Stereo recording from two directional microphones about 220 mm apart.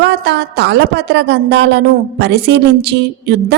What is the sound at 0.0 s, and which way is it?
A woman's voice, 50° right (ahead or behind).